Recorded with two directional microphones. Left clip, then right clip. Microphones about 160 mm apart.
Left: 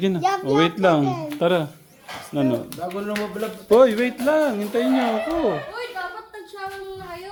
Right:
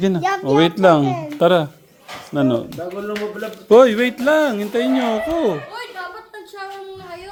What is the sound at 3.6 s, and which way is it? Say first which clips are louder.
Speech: right 4 dB; 55° right (ahead or behind).